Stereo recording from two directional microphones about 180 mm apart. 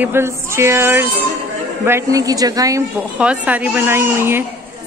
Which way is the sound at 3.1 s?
5° right (ahead or behind).